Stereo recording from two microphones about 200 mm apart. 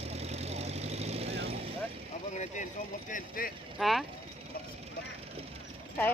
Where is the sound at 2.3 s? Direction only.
35° left (ahead or behind).